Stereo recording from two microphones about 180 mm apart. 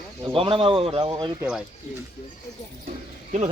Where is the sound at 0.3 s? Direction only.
30° right (ahead or behind).